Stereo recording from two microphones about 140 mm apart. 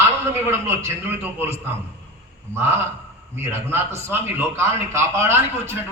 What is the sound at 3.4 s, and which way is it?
A man's voice, 20° right (ahead or behind).